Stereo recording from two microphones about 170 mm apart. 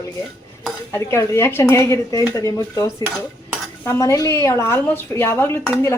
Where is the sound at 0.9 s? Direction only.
15° left (ahead or behind).